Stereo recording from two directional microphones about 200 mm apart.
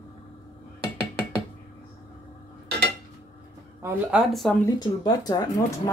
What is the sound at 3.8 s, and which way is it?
Speech, 10° right (ahead or behind).